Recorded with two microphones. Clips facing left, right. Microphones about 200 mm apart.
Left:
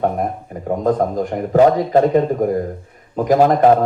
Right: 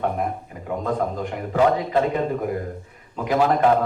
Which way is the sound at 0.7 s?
40° left (ahead or behind).